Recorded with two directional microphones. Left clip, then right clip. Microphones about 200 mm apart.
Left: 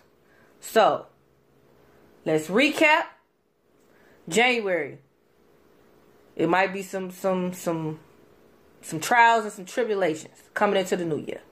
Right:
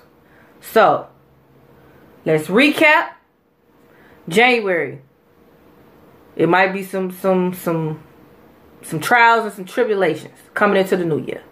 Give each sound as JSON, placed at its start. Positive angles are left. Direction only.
{"t": 0.7, "sound": "a woman's voice", "side_deg": 35}
{"t": 2.4, "sound": "a woman's voice", "side_deg": 35}
{"t": 4.3, "sound": "a woman's voice", "side_deg": 35}
{"t": 6.3, "sound": "a woman's voice", "side_deg": 35}